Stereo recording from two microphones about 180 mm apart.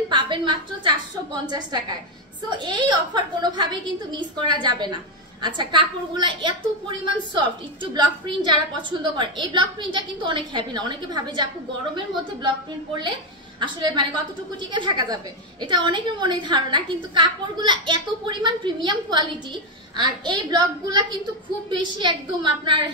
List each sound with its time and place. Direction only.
0.1 s a woman's voice: 25° right (ahead or behind)
13.6 s a woman's voice: 25° right (ahead or behind)